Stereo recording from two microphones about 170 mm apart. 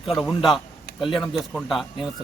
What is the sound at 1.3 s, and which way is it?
Speech, centre (ahead or behind).